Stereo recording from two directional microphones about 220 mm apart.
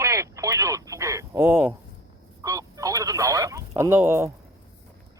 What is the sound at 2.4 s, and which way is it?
Telephone, 15° right (ahead or behind).